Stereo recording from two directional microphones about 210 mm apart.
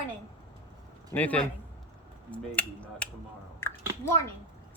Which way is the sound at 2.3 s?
5° left (ahead or behind).